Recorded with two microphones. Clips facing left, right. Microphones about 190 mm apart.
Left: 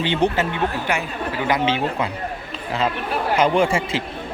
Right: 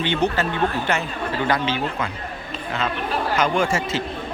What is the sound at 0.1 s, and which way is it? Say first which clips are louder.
Speech: left 2 dB; 30° left (ahead or behind).